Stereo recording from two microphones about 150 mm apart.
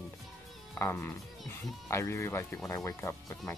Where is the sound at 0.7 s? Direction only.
15° left (ahead or behind).